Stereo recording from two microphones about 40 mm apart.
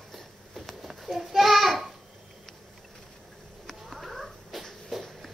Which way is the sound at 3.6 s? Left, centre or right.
Centre.